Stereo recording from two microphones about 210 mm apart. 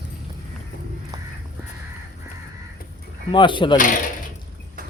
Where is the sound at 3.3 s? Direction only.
20° left (ahead or behind).